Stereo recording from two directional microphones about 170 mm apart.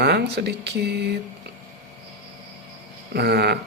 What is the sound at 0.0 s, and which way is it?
Speech, 75° right (ahead or behind).